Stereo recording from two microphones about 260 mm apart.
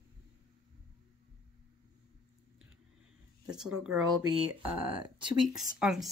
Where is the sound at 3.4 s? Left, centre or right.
Centre.